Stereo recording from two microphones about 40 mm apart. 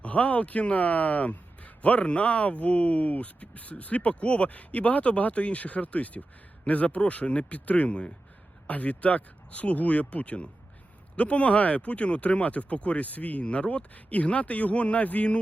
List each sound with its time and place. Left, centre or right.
0.0 s speech: left
13.4 s speech: left
13.9 s speech: left